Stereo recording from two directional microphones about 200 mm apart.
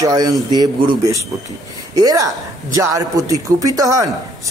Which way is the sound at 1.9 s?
15° right (ahead or behind).